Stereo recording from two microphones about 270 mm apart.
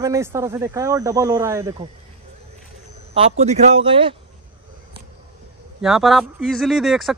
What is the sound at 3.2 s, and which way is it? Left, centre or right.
Speech, right.